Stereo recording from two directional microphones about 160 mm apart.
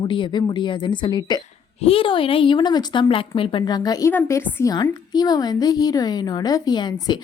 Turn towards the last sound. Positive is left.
turn(degrees=25)  # may be behind; listen again after turning